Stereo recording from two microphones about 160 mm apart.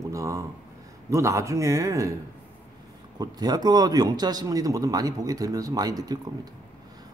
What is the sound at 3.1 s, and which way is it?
A man's voice, 25° right (ahead or behind).